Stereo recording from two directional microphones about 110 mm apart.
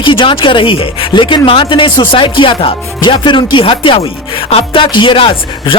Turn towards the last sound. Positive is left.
turn(degrees=50)  # may be behind; listen again after turning